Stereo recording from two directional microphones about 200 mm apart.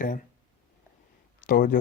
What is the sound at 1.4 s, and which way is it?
Speech, 45° left (ahead or behind).